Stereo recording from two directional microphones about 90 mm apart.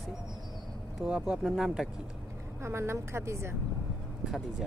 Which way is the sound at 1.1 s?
5° right (ahead or behind).